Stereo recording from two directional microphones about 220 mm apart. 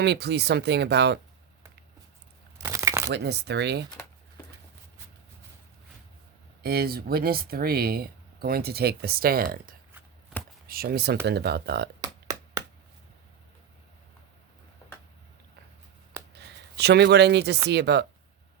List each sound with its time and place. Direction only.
0.0 s speech: 50° right (ahead or behind)
2.6 s crumpling: 15° right (ahead or behind)
3.1 s speech: 50° right (ahead or behind)
6.6 s speech: 45° right (ahead or behind)
11.9 s music: 15° right (ahead or behind)
16.3 s speech: 50° right (ahead or behind)